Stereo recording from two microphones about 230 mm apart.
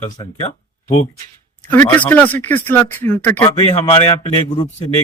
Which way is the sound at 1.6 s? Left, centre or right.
Centre.